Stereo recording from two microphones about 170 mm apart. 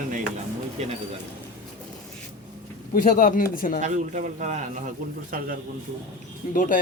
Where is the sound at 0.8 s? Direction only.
40° right (ahead or behind).